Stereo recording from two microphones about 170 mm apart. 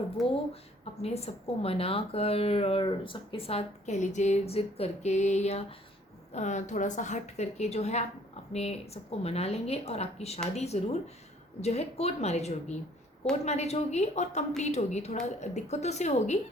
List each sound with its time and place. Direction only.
0.2 s speech: centre (ahead or behind)
1.0 s a woman's voice: 35° left (ahead or behind)